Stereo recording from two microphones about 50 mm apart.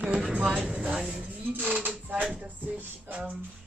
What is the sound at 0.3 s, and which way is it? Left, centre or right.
Music, right.